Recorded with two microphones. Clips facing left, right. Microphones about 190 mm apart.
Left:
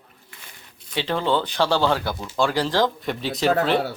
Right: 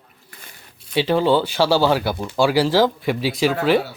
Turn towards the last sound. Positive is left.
turn(degrees=-5)  # may be behind; listen again after turning